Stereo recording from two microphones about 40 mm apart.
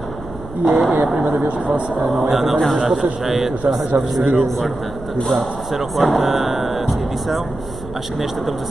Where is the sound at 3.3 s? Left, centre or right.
Centre.